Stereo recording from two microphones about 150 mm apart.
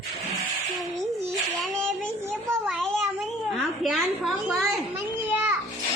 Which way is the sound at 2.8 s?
5° left (ahead or behind).